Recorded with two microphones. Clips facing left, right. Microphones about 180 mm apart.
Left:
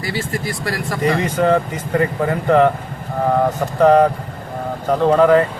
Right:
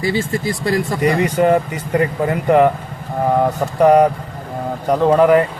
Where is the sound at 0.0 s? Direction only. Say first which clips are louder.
Right 4 dB; 25° right (ahead or behind).